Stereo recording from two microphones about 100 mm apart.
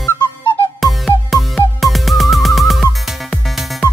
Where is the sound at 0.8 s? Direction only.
Centre (ahead or behind).